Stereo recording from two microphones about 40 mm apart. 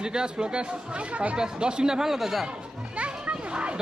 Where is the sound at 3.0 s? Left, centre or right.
Right.